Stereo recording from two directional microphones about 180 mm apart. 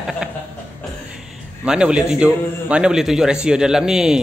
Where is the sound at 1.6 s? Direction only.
5° right (ahead or behind).